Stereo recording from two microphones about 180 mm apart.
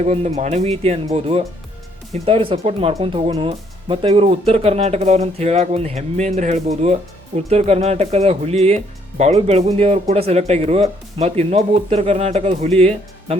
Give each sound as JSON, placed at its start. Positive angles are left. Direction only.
{"t": 0.0, "sound": "speech", "side_deg": -35}